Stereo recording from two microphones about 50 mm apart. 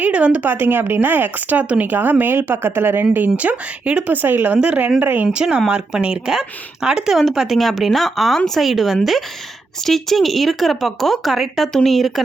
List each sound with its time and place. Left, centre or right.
0.0 s speech: right
0.4 s speech: right
3.3 s speech: right
4.1 s speech: right
5.3 s speech: centre
7.3 s speech: centre